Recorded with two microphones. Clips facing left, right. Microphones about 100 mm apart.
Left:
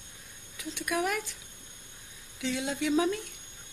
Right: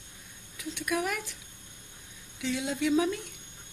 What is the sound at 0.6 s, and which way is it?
Speech, centre (ahead or behind).